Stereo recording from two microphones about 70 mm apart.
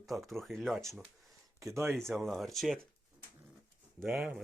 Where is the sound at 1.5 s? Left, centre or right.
Right.